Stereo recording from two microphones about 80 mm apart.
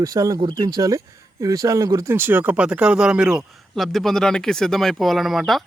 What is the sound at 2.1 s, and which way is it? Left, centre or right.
Speech, right.